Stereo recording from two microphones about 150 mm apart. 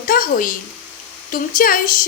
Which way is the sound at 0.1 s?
70° left (ahead or behind).